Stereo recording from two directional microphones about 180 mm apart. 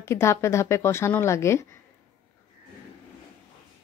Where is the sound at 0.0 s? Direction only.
15° left (ahead or behind).